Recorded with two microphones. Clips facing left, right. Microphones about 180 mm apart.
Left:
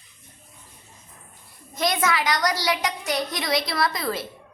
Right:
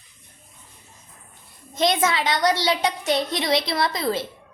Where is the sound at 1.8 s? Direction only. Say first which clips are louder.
Right 3 dB; 25° right (ahead or behind).